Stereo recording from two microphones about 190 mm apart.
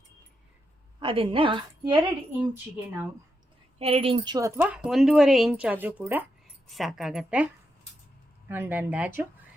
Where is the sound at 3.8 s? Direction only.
30° right (ahead or behind); by 7.5 s 5° right (ahead or behind).